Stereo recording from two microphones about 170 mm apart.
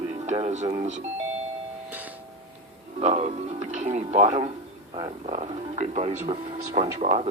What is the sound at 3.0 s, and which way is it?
Music, 35° right (ahead or behind).